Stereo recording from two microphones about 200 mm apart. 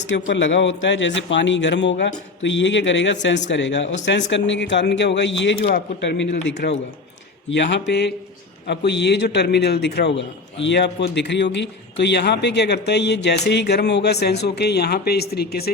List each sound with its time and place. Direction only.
0.1 s a man's voice: 65° left (ahead or behind)